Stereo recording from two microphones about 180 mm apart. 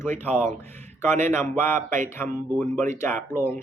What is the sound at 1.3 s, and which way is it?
Speech, 15° left (ahead or behind).